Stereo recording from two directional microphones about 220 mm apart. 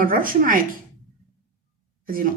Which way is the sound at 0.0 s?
40° right (ahead or behind).